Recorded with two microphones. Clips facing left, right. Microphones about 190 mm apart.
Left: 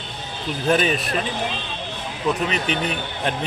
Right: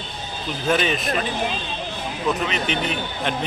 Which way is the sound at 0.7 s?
35° left (ahead or behind).